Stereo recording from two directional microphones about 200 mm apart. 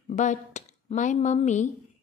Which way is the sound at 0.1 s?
35° left (ahead or behind).